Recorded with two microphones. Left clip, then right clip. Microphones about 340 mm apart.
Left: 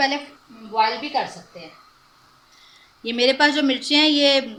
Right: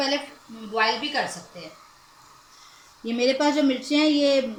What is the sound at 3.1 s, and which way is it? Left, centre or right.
Speech, left.